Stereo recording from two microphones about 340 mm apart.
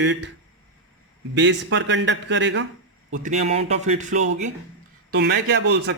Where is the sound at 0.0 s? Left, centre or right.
Right.